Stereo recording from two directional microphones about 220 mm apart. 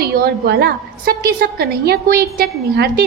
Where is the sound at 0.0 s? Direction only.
45° right (ahead or behind).